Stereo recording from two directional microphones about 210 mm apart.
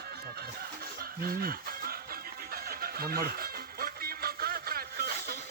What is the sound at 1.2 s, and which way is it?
Chicken, 45° right (ahead or behind).